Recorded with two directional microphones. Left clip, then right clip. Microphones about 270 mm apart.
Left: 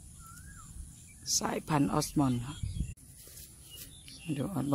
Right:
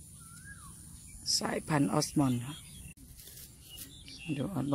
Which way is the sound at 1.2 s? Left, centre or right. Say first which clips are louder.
Even; centre.